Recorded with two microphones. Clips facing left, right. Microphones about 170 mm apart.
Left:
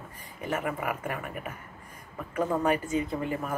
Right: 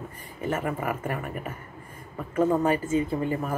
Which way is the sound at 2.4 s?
25° right (ahead or behind).